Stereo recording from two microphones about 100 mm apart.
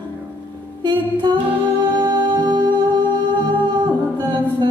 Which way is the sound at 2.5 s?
50° right (ahead or behind).